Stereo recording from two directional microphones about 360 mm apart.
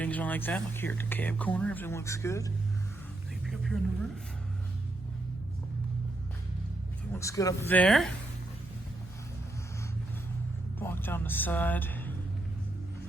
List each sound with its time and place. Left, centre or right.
0.0 s speech: centre
3.4 s vehicle: centre
7.1 s speech: centre
10.8 s speech: centre